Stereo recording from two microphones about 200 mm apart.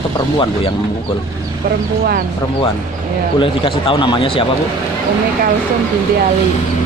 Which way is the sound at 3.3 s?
25° left (ahead or behind).